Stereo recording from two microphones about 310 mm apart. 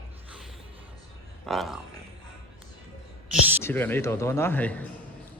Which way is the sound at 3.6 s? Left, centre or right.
Centre.